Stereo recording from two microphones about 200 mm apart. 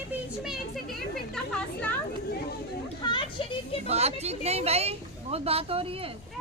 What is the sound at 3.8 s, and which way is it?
Speech, 30° right (ahead or behind).